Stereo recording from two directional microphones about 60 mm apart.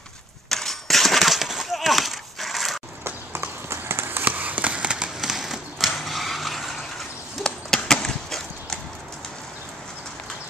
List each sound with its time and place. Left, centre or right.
0.5 s a sound: centre
3.0 s run: right; by 6.9 s centre
7.4 s chop: centre